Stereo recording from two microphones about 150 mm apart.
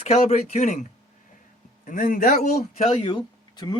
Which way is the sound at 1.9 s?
60° left (ahead or behind).